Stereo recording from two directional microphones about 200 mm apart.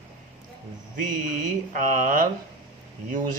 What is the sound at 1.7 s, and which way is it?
Speech, 40° right (ahead or behind).